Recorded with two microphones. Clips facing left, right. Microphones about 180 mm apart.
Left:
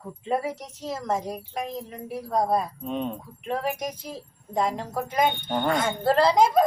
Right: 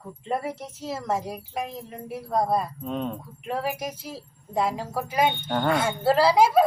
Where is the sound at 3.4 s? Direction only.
5° right (ahead or behind).